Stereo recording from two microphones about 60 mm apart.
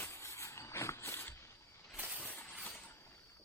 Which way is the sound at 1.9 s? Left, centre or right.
Right.